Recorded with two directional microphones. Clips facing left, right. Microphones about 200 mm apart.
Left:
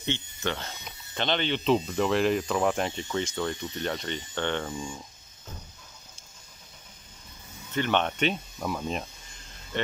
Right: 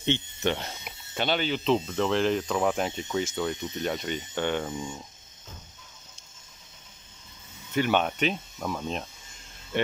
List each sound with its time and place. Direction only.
0.0 s speech: 20° right (ahead or behind); by 3.5 s 5° right (ahead or behind)
3.5 s speech: 20° right (ahead or behind)
3.8 s speech: 5° right (ahead or behind)
7.7 s speech: 10° right (ahead or behind)